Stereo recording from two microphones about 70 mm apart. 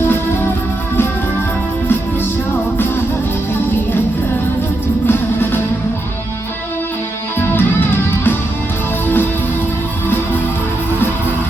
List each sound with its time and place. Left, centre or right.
5.0 s music: left
7.3 s music: left